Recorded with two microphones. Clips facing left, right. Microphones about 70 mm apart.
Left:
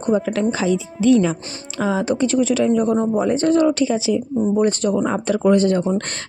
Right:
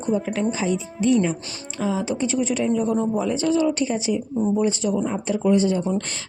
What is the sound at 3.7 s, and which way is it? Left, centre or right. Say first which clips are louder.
Speech: left 4 dB; left.